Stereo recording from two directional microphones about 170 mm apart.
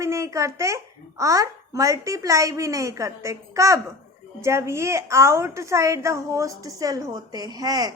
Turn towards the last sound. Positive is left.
turn(degrees=-20)  # may be behind; listen again after turning